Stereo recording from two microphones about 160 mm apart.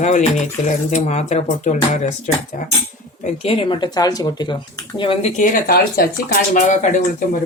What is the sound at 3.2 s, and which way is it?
Speech, 35° left (ahead or behind).